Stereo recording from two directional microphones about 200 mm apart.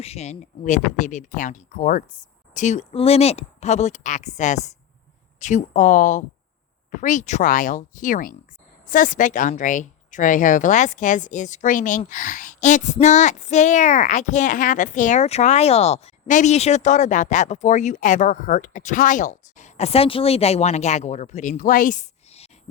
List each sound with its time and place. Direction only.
0.0 s speech: 30° left (ahead or behind)